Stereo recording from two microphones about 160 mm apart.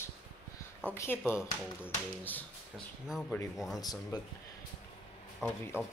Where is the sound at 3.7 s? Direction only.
25° left (ahead or behind).